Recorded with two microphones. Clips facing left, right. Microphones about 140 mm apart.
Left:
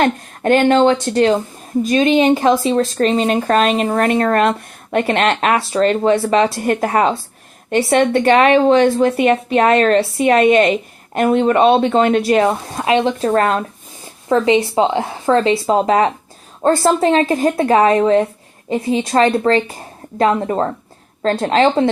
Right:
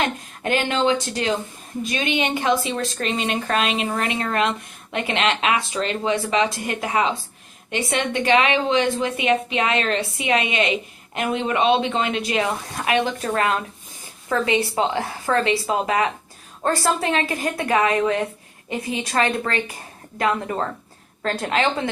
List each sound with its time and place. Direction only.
0.0 s a woman's voice: 50° left (ahead or behind); by 13.3 s 25° left (ahead or behind)
13.3 s a woman's voice: 40° left (ahead or behind)
14.3 s a woman's voice: 25° left (ahead or behind)